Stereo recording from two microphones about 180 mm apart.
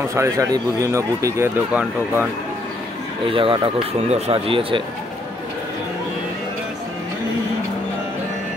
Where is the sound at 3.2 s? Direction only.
30° right (ahead or behind).